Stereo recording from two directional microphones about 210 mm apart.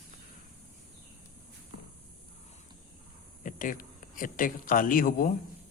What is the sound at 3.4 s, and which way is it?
Speech, 40° left (ahead or behind).